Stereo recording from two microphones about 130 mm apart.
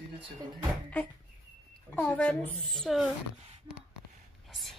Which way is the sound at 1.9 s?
10° left (ahead or behind).